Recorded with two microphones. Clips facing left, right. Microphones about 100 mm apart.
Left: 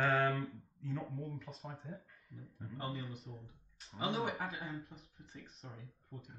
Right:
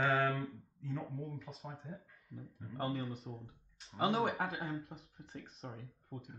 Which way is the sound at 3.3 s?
55° right (ahead or behind).